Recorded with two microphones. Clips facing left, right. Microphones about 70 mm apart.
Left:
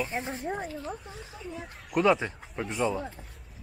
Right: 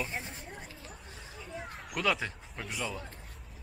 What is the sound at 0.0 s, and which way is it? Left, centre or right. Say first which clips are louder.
A child's voice: left 7 dB; centre.